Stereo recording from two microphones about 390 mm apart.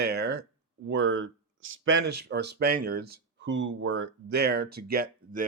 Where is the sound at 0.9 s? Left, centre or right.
Right.